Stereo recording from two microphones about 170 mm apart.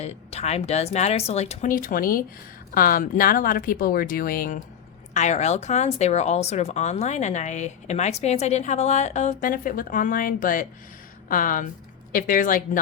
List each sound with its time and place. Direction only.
0.0 s a woman's voice: 40° left (ahead or behind)
5.1 s a woman's voice: 40° left (ahead or behind)